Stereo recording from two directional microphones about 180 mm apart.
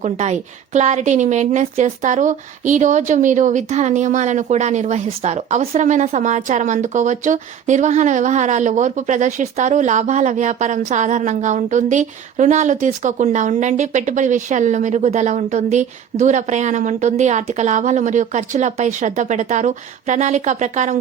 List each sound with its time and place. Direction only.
0.0 s a woman's voice: 40° right (ahead or behind)